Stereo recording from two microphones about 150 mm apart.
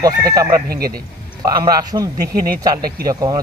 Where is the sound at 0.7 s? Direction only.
90° right.